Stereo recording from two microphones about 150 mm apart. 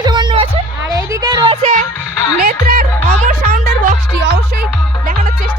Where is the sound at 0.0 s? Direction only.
30° right (ahead or behind).